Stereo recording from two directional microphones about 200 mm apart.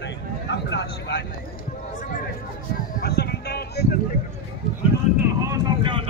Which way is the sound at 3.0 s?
50° left (ahead or behind).